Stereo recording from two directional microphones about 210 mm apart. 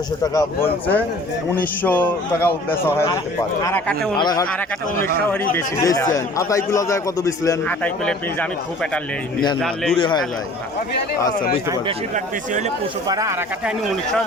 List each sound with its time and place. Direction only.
0.3 s a man's voice: 10° left (ahead or behind)
4.2 s a man's voice: 20° left (ahead or behind)
8.0 s speech: 5° left (ahead or behind)
13.1 s speech: 15° right (ahead or behind)
13.7 s speech: centre (ahead or behind)